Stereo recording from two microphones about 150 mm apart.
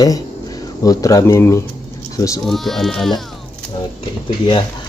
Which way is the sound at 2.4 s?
Centre (ahead or behind).